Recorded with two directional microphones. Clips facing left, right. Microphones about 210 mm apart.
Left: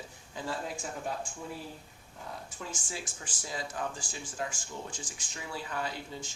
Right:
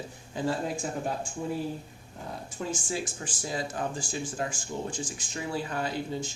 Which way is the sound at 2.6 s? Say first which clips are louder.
Right 11 dB; 35° right (ahead or behind).